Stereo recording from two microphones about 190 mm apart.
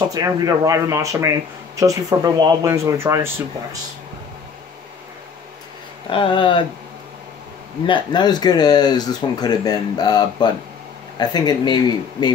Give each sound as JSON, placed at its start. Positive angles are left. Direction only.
{"t": 0.1, "sound": "speech", "side_deg": -15}
{"t": 6.0, "sound": "speech", "side_deg": 25}
{"t": 7.8, "sound": "speech", "side_deg": 25}